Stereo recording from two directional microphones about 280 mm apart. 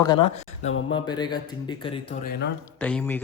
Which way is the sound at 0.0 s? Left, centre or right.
Centre.